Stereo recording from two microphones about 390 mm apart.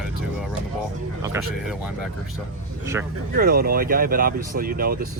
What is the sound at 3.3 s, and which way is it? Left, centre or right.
Speech, right.